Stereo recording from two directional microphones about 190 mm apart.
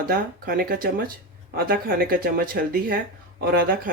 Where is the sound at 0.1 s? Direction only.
50° right (ahead or behind).